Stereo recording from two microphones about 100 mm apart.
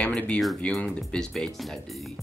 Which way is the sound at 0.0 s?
10° left (ahead or behind).